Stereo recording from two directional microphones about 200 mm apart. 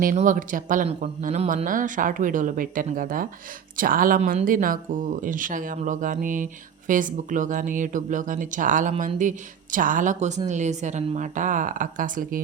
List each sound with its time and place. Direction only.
0.0 s speech: 40° right (ahead or behind)